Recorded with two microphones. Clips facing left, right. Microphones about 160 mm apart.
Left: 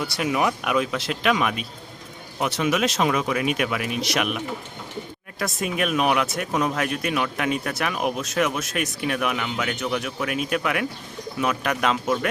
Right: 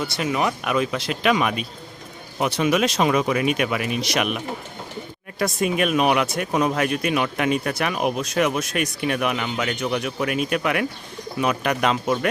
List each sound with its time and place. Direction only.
0.2 s speech: 10° left (ahead or behind)